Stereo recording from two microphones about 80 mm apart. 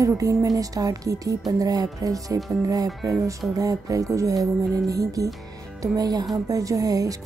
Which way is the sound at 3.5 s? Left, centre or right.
Right.